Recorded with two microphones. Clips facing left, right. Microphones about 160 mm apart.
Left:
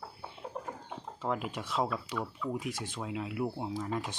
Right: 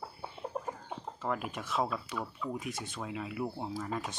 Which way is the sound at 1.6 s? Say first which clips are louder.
Left 1 dB; 10° left (ahead or behind).